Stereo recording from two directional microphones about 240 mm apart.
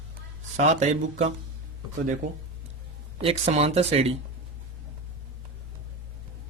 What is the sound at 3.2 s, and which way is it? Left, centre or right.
Speech, right.